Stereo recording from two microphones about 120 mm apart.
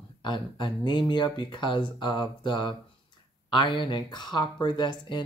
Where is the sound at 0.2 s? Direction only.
40° left (ahead or behind).